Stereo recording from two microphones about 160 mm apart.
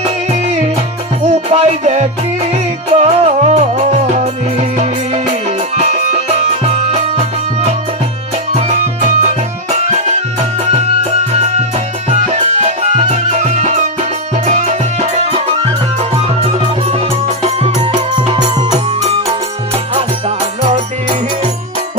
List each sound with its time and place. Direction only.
1.5 s music: 40° right (ahead or behind)
11.3 s music: 45° right (ahead or behind)
18.1 s music: 25° right (ahead or behind)
19.0 s music: 35° right (ahead or behind)